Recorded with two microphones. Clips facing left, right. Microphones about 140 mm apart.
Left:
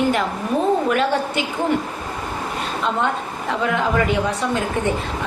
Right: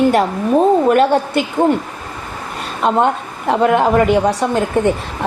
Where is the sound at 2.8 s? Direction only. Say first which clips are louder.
Right 8 dB; 50° right (ahead or behind).